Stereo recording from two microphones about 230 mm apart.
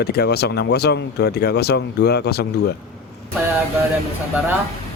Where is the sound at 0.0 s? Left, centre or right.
Left.